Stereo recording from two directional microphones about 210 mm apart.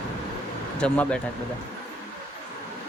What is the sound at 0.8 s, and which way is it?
Speech, 5° left (ahead or behind).